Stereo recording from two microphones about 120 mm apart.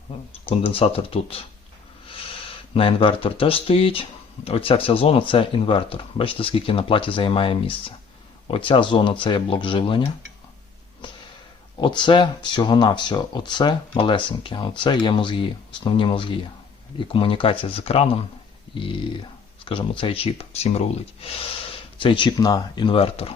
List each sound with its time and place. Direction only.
0.7 s speech: 50° left (ahead or behind)
11.8 s speech: 40° left (ahead or behind); by 18.2 s 55° left (ahead or behind)
18.7 s speech: 45° left (ahead or behind)